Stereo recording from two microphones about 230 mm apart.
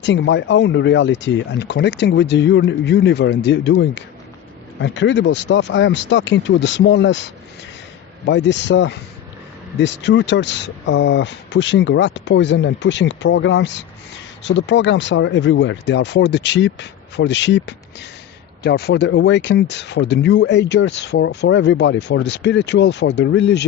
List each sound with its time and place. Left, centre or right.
0.0 s speech: left
8.3 s speech: left